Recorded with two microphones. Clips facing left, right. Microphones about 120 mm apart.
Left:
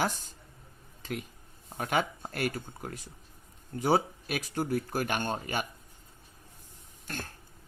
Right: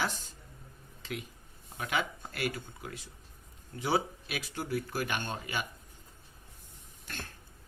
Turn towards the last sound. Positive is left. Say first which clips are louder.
# left 5 dB
turn(degrees=45)  # may be behind; listen again after turning